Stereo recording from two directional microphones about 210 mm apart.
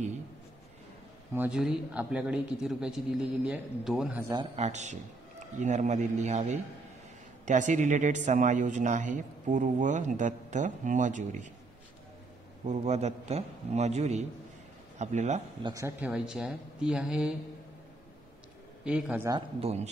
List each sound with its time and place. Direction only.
1.3 s a man's voice: 5° right (ahead or behind)
4.6 s speech: 35° right (ahead or behind)
12.6 s speech: 30° right (ahead or behind)
15.6 s a man's voice: 15° right (ahead or behind)
16.1 s a man's voice: 5° right (ahead or behind)
18.9 s a man's voice: 5° right (ahead or behind)
19.3 s speech: 30° right (ahead or behind)